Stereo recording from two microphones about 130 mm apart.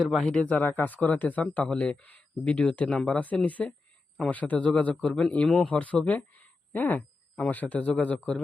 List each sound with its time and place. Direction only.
0.0 s a man's voice: centre (ahead or behind)